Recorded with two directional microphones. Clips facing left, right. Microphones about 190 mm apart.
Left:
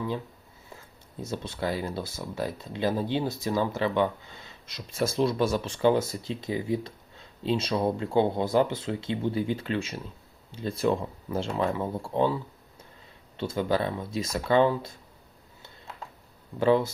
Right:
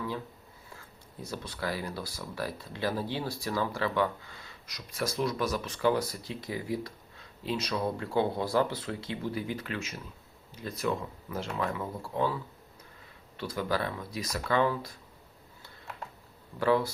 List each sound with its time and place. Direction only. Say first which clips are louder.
0.7 s speech: left 4 dB; 20° left (ahead or behind)
16.6 s speech: left 4 dB; 20° left (ahead or behind)